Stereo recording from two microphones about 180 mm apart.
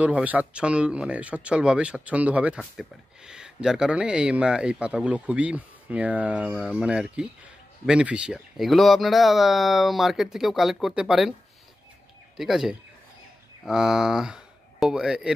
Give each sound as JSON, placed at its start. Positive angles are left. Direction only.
{"t": 0.0, "sound": "speech", "side_deg": -10}
{"t": 12.4, "sound": "speech", "side_deg": 0}